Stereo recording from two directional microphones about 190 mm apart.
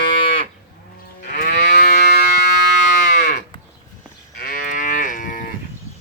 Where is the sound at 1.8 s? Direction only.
60° left (ahead or behind).